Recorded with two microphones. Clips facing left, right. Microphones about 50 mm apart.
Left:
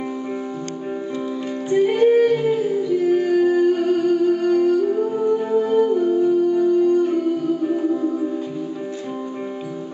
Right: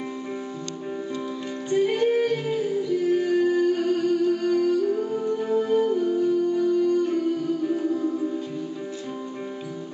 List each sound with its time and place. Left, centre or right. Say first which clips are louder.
1.7 s music: left 6 dB; centre